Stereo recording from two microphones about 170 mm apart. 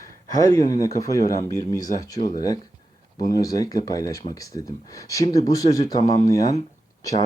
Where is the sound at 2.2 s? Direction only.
50° left (ahead or behind).